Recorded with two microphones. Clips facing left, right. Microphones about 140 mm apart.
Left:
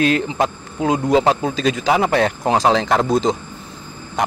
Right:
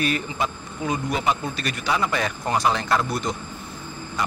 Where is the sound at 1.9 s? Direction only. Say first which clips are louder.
Left 7 dB; 70° left (ahead or behind).